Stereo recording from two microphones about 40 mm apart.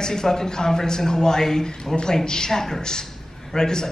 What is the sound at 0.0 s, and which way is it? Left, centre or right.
Speech, centre.